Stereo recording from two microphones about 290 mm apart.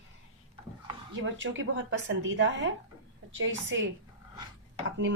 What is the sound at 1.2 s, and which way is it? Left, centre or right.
A woman's voice, right.